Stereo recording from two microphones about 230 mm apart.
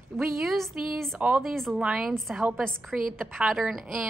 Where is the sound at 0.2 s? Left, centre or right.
Centre.